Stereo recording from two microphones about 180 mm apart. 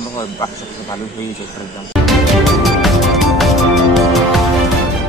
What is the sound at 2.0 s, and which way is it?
Music, centre (ahead or behind).